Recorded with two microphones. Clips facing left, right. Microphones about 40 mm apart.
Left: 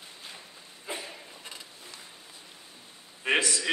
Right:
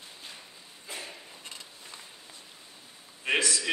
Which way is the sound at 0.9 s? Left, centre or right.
Left.